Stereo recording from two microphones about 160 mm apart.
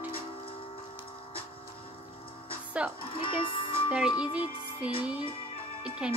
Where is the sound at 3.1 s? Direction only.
35° left (ahead or behind).